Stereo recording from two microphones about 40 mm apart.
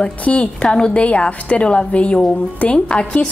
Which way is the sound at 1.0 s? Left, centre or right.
Left.